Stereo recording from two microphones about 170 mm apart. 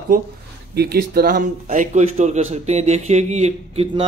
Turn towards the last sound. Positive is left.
turn(degrees=-40)  # may be behind; listen again after turning